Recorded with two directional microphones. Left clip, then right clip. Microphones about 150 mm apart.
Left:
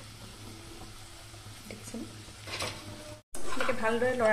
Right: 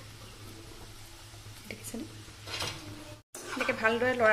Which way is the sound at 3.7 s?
5° right (ahead or behind).